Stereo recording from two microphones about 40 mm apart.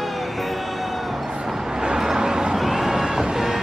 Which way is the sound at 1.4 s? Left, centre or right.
Centre.